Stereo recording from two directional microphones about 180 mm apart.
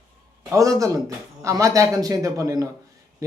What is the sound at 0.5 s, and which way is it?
Speech, 20° right (ahead or behind).